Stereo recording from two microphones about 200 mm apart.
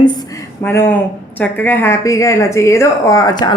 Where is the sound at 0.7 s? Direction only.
10° left (ahead or behind).